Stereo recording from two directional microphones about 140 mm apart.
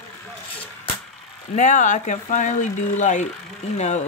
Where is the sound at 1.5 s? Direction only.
60° left (ahead or behind).